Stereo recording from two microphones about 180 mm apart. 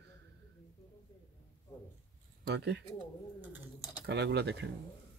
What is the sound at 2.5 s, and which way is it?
Speech, 70° right (ahead or behind).